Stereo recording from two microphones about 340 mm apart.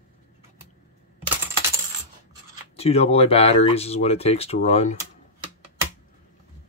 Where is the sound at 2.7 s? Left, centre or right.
Centre.